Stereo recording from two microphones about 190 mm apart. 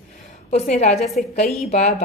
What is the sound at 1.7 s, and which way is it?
Speech, 35° left (ahead or behind).